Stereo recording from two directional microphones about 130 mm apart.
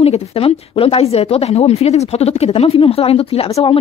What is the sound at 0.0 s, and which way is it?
A woman's voice, 50° left (ahead or behind).